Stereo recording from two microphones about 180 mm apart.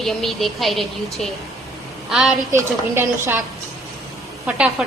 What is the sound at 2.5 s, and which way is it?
Speech, 15° right (ahead or behind).